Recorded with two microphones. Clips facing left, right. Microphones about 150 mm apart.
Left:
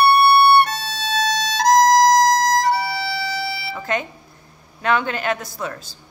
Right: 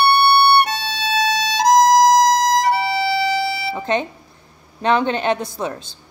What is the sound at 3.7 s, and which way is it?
Speech, 25° right (ahead or behind).